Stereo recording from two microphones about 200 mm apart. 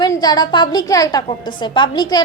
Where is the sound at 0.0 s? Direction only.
20° left (ahead or behind).